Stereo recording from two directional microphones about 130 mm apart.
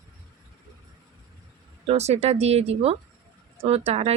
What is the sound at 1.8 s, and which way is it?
Speech, 55° right (ahead or behind).